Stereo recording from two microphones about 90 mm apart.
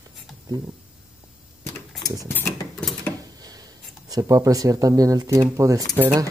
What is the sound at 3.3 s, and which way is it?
Speech, 45° right (ahead or behind).